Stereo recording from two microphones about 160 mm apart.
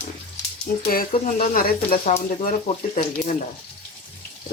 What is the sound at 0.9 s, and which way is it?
Speech, 65° left (ahead or behind).